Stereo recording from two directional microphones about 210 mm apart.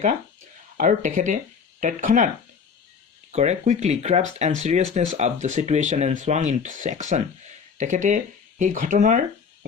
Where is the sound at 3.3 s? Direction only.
35° right (ahead or behind).